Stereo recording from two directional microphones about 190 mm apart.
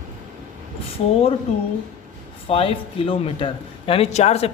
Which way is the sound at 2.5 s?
30° left (ahead or behind).